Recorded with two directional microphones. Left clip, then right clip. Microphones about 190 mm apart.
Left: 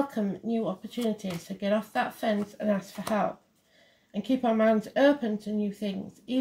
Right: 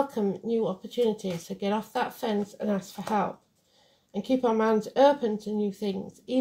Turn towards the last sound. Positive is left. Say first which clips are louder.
# right 3 dB
turn(degrees=-35)  # may be behind; listen again after turning